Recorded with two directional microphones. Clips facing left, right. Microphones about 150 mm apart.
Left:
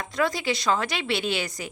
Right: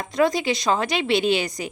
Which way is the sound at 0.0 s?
20° right (ahead or behind).